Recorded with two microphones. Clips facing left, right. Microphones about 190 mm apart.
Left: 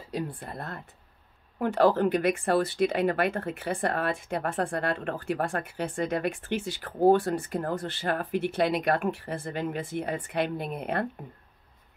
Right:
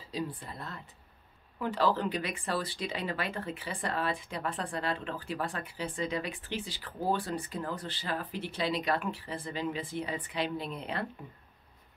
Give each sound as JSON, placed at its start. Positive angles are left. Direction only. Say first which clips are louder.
{"t": 0.1, "sound": "speech", "louder": "left 3 dB", "side_deg": 55}